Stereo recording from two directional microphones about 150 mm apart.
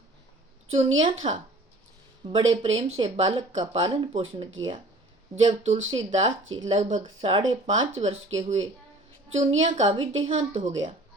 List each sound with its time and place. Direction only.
0.7 s speech: 40° right (ahead or behind)
7.0 s speech: 35° right (ahead or behind)